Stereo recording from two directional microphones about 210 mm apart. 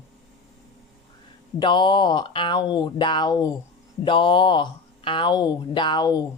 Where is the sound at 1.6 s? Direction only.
20° left (ahead or behind).